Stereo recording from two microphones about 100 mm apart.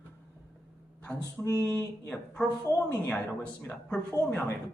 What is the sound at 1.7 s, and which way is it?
Speech, 10° left (ahead or behind).